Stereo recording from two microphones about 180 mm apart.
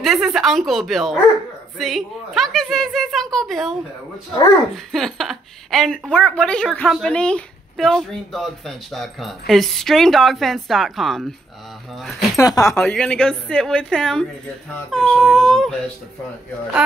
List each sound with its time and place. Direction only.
0.0 s a woman's voice: centre (ahead or behind)
4.7 s a woman's voice: centre (ahead or behind)
12.4 s speech: 20° left (ahead or behind)
12.7 s a woman's voice: 5° left (ahead or behind)